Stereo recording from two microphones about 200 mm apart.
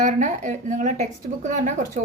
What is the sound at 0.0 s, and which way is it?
Speech, 40° right (ahead or behind).